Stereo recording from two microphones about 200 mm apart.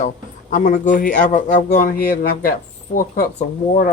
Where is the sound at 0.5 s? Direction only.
40° left (ahead or behind).